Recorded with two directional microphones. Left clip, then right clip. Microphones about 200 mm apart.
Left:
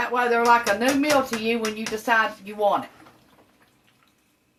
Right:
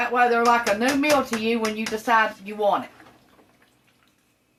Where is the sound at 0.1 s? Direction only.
20° right (ahead or behind).